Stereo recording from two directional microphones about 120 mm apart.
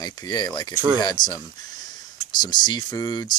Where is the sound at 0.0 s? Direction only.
35° left (ahead or behind).